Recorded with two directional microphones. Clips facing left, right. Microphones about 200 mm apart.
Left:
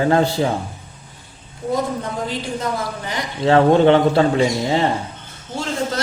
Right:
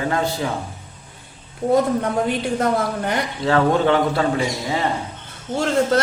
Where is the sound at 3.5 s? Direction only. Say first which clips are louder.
Left 5 dB; 25° left (ahead or behind).